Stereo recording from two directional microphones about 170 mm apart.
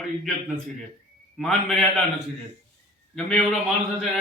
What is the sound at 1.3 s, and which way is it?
Speech, centre (ahead or behind).